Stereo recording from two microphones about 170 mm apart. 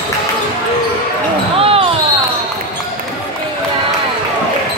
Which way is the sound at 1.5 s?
35° right (ahead or behind).